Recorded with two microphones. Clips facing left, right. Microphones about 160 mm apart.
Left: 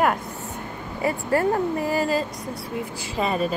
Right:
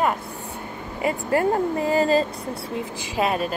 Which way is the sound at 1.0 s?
20° right (ahead or behind).